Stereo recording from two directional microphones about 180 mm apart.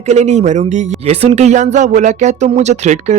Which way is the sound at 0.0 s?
40° right (ahead or behind).